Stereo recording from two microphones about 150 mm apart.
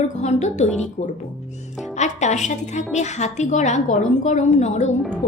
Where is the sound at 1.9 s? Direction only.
50° left (ahead or behind).